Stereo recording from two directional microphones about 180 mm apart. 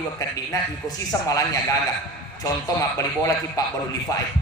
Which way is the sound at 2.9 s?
20° left (ahead or behind).